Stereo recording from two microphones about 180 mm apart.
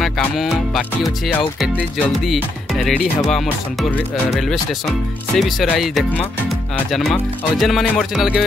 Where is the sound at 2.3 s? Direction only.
Centre (ahead or behind).